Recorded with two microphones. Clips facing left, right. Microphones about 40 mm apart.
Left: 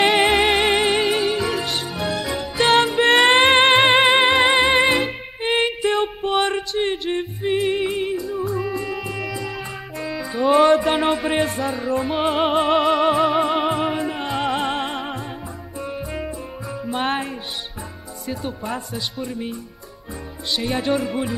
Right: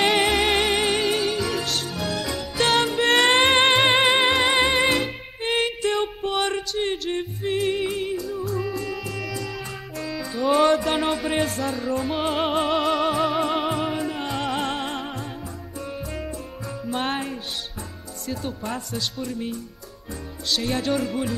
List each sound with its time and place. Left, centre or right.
0.2 s music: centre
18.2 s speech: centre